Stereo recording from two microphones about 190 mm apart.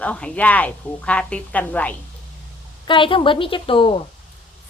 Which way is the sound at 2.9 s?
25° left (ahead or behind).